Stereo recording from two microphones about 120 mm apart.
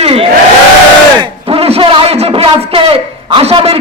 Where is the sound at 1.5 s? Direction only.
55° right (ahead or behind).